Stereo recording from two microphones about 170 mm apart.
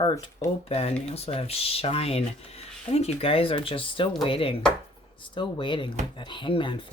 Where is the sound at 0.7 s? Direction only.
35° left (ahead or behind).